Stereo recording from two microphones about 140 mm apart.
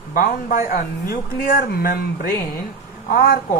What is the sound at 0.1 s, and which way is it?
Speech, 90° left.